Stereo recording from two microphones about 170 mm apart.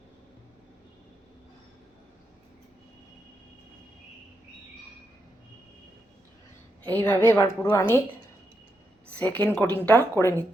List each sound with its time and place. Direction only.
6.8 s a woman's voice: 10° left (ahead or behind)
9.1 s a woman's voice: 10° left (ahead or behind)